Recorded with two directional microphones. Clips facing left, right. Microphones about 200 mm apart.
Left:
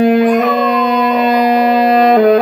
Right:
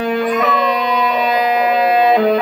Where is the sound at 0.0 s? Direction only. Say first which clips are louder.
Left 7 dB; 45° left (ahead or behind).